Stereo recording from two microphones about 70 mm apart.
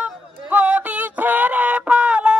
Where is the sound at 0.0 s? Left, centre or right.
Right.